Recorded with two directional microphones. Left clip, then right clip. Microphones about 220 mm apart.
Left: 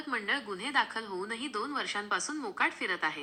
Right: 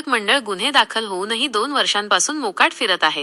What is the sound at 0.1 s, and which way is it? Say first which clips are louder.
A woman's voice: right 15 dB; 45° right (ahead or behind).